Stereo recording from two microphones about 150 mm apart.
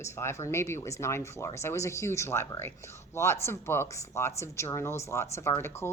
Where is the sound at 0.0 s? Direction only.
15° left (ahead or behind).